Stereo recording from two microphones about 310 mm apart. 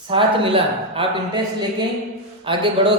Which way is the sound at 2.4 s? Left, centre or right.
Centre.